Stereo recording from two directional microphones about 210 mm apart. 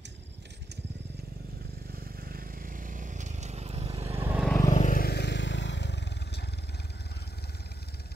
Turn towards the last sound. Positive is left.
turn(degrees=50)  # may be behind; listen again after turning